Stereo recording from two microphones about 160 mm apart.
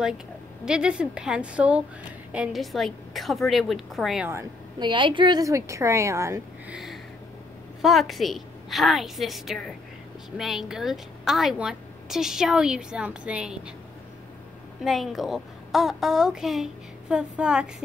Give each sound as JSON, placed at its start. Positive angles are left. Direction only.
{"t": 0.7, "sound": "a woman's voice", "side_deg": -5}
{"t": 4.3, "sound": "a woman's voice", "side_deg": -15}
{"t": 4.8, "sound": "a woman's voice", "side_deg": -30}
{"t": 6.7, "sound": "a sound", "side_deg": 0}
{"t": 7.8, "sound": "a woman's voice", "side_deg": 0}
{"t": 14.8, "sound": "a woman's voice", "side_deg": 0}